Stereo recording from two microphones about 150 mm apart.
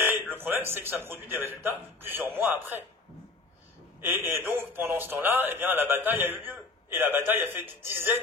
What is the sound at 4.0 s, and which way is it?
A man's voice, 15° right (ahead or behind).